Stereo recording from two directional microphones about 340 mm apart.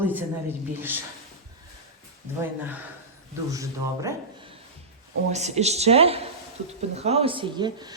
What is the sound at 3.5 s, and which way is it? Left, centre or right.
Speech, centre.